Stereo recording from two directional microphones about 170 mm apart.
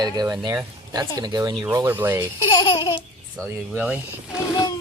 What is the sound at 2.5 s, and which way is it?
Laughter, 25° left (ahead or behind).